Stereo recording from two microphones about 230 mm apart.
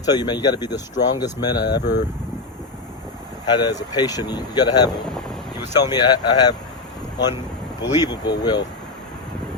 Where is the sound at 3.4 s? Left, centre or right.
Centre.